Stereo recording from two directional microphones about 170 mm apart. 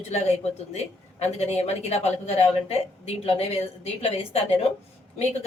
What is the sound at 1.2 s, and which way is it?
A woman's voice, 40° left (ahead or behind).